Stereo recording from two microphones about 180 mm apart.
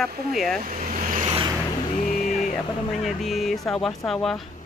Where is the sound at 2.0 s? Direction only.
45° left (ahead or behind).